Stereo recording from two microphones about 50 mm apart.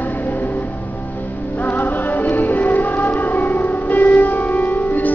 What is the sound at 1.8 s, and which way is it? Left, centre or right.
Music, left.